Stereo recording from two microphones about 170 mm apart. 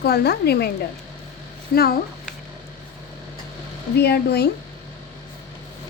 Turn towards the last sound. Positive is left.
turn(degrees=70)  # may be behind; listen again after turning